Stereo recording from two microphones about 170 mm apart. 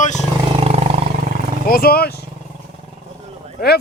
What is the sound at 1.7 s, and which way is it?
Speech, 65° left (ahead or behind).